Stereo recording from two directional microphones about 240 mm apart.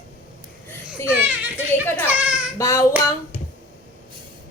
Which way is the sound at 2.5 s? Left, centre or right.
Centre.